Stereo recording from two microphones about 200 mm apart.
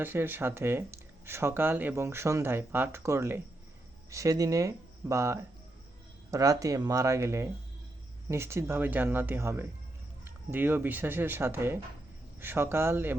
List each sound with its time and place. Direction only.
0.0 s speech: 10° right (ahead or behind)